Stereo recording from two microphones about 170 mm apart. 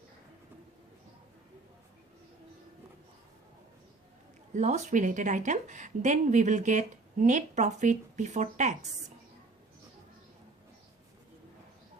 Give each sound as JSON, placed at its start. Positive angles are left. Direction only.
{"t": 4.5, "sound": "a woman's voice", "side_deg": -45}